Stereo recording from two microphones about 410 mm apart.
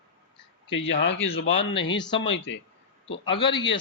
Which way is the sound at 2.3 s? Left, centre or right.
Left.